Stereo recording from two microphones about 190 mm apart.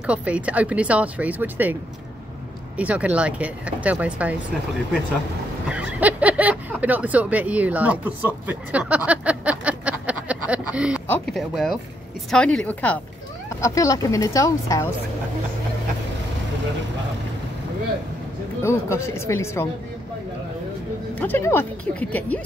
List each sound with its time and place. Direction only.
0.0 s speech: 5° right (ahead or behind)
2.8 s speech: 5° right (ahead or behind)
5.7 s speech: 5° right (ahead or behind)
8.5 s a sound: 5° right (ahead or behind)
11.1 s speech: centre (ahead or behind); by 14.9 s 15° left (ahead or behind)
18.6 s speech: 15° left (ahead or behind)
21.1 s speech: 10° left (ahead or behind)